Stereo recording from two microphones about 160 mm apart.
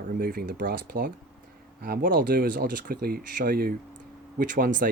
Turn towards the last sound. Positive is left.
turn(degrees=-65)  # may be behind; listen again after turning